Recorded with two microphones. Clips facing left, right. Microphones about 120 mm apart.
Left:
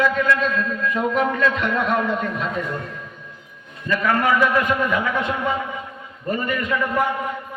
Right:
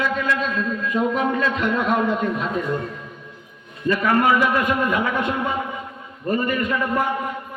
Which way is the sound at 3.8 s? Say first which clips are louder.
Right 2 dB; 35° right (ahead or behind).